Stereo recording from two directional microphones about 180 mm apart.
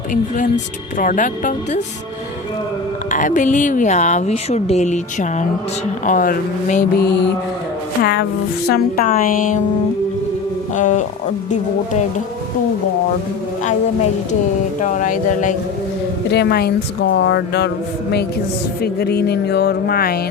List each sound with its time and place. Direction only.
0.1 s speech: 45° left (ahead or behind)
3.1 s speech: 45° left (ahead or behind)
7.0 s speech: 70° left (ahead or behind)
8.7 s speech: 55° left (ahead or behind)
10.8 s speech: 45° left (ahead or behind)
14.8 s speech: 45° left (ahead or behind)
16.3 s speech: 65° left (ahead or behind)
18.8 s music: 60° left (ahead or behind)